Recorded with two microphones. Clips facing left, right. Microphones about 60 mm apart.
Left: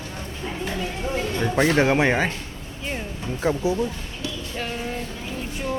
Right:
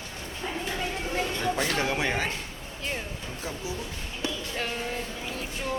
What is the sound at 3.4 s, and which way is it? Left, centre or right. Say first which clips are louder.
Speech: left 15 dB; left.